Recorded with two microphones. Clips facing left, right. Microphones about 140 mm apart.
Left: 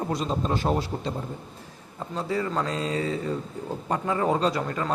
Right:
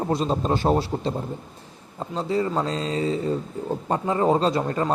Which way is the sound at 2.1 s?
25° right (ahead or behind).